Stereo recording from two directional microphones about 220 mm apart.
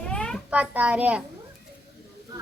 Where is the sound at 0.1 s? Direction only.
5° left (ahead or behind).